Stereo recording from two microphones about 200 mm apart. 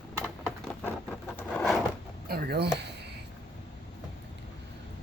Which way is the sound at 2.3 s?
50° right (ahead or behind).